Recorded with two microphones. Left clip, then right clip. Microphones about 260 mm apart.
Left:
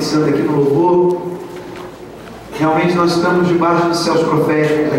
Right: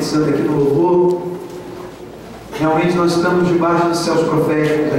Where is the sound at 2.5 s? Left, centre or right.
Centre.